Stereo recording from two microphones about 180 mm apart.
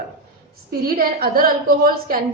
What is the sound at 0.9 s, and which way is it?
A woman's voice, 55° right (ahead or behind).